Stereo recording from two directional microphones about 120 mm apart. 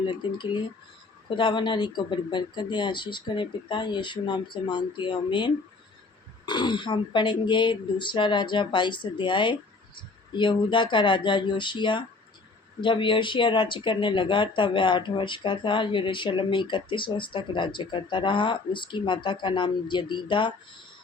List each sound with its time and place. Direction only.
0.1 s speech: 40° left (ahead or behind)